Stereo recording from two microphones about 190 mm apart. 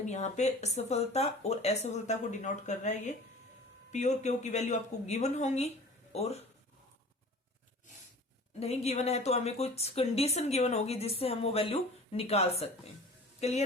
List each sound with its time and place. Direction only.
0.0 s speech: 35° left (ahead or behind)
8.5 s speech: 35° left (ahead or behind)